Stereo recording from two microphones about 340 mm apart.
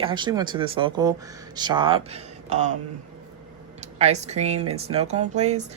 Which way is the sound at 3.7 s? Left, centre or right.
Centre.